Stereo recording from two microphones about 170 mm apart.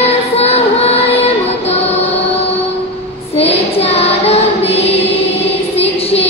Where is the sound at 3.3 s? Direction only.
35° left (ahead or behind).